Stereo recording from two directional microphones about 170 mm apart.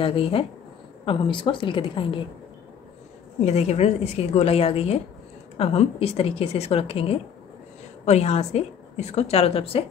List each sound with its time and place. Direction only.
0.0 s a woman's voice: 35° left (ahead or behind)
3.3 s a woman's voice: 40° left (ahead or behind)